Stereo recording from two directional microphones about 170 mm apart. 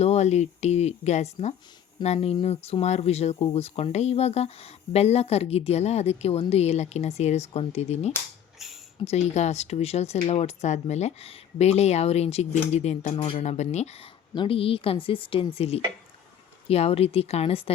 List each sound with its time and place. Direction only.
0.0 s speech: 40° left (ahead or behind)